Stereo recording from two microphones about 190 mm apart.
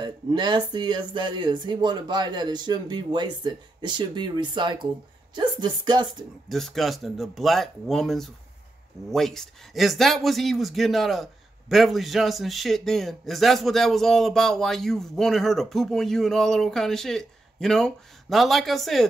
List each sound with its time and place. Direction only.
0.0 s speech: 25° right (ahead or behind)
6.5 s a man's voice: centre (ahead or behind)